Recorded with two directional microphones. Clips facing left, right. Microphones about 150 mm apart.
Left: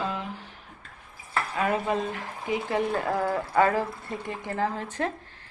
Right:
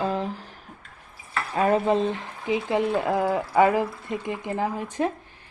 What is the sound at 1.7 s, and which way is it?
Speech, 30° right (ahead or behind).